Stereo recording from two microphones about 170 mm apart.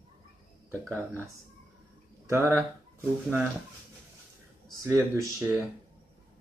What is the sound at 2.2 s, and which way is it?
Speech, 15° right (ahead or behind).